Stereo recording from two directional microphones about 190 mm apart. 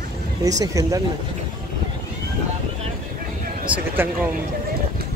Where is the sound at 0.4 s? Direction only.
20° right (ahead or behind).